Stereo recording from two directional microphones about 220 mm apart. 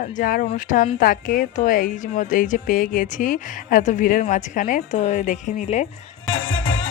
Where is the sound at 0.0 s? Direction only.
40° left (ahead or behind).